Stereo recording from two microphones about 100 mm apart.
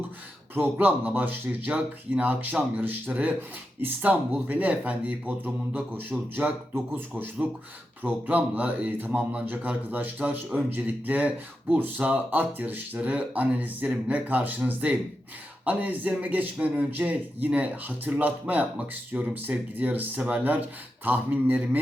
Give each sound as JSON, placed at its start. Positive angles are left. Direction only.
{"t": 0.5, "sound": "speech", "side_deg": -20}
{"t": 8.0, "sound": "speech", "side_deg": -15}